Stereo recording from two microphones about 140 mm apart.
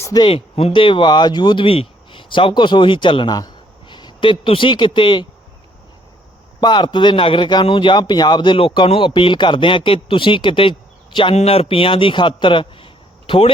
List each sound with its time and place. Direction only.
0.0 s speech: 25° left (ahead or behind)
0.3 s speech: 40° left (ahead or behind)
6.6 s a man's voice: 30° left (ahead or behind)